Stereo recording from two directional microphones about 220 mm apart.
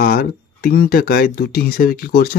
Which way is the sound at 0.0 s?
40° left (ahead or behind).